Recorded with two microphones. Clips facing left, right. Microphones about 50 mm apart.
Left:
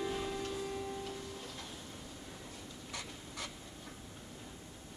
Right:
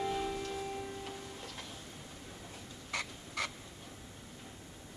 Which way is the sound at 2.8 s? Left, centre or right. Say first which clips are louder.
Right 8 dB; right.